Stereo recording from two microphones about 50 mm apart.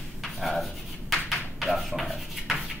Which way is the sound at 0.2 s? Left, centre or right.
Centre.